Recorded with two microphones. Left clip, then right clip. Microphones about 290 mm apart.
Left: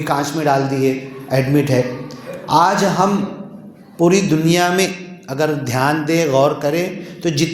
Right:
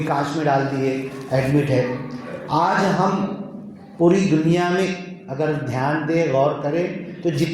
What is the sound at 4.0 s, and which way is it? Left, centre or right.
A man's voice, left.